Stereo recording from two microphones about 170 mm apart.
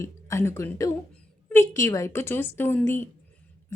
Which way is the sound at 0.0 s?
15° left (ahead or behind).